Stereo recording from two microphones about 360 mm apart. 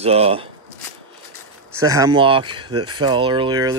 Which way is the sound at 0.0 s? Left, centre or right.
Centre.